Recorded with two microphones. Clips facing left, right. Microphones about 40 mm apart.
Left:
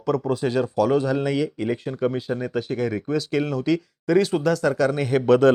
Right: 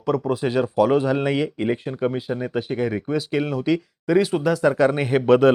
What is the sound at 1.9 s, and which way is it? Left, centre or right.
Speech, centre.